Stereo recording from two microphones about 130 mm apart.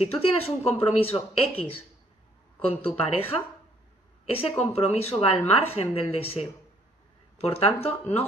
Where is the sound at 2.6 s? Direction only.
45° left (ahead or behind).